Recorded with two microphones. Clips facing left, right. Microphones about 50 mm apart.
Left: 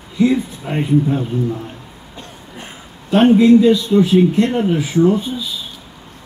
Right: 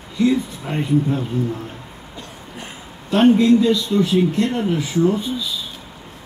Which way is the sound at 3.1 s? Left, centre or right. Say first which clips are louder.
Left 3 dB; centre.